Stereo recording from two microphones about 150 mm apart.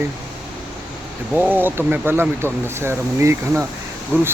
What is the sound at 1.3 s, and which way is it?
Speech, 15° right (ahead or behind).